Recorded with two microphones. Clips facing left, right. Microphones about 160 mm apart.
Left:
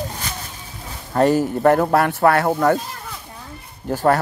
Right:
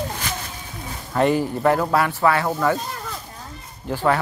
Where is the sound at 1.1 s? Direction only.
40° left (ahead or behind).